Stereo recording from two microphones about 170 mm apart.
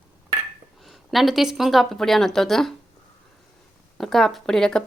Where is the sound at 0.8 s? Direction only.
Centre (ahead or behind).